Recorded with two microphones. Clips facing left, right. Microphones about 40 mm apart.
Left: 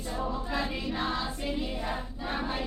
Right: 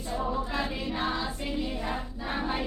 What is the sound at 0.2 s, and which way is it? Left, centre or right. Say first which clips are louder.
Music: right 1 dB; centre.